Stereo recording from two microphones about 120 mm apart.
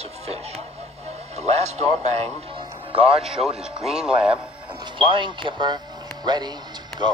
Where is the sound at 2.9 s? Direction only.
55° right (ahead or behind).